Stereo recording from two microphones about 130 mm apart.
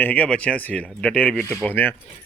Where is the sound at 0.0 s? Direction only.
10° left (ahead or behind).